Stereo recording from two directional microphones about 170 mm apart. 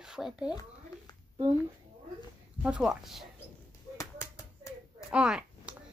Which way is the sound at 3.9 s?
20° left (ahead or behind).